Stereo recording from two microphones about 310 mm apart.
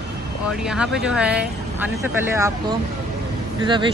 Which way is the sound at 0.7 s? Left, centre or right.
Centre.